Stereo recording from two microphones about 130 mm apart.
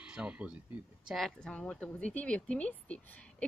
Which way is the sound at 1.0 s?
Centre (ahead or behind).